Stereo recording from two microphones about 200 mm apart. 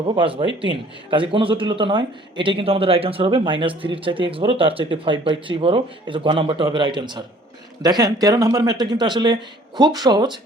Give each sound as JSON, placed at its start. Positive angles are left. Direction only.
{"t": 0.1, "sound": "a man's voice", "side_deg": -25}